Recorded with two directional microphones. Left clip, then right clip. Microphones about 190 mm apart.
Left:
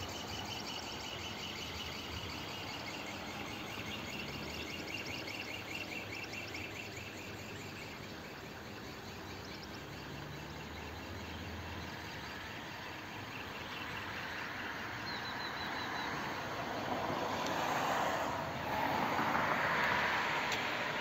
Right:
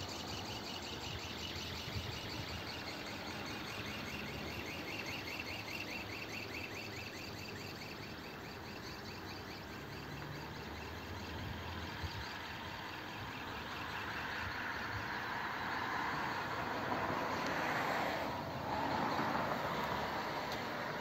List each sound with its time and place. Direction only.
15.3 s vehicle: 45° left (ahead or behind)
18.8 s vehicle: 20° left (ahead or behind)
19.1 s vehicle: 5° left (ahead or behind); by 21.0 s 25° right (ahead or behind)